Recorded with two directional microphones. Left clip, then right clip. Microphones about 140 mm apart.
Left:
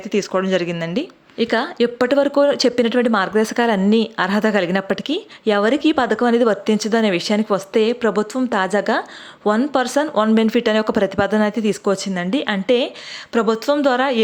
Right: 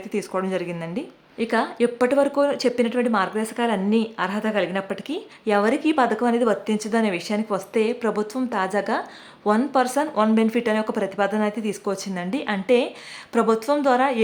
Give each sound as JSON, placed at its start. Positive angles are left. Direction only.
{"t": 0.1, "sound": "a woman's voice", "side_deg": 25}